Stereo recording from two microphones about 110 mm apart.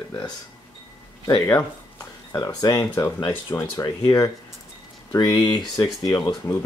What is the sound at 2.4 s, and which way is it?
Speech, 35° left (ahead or behind).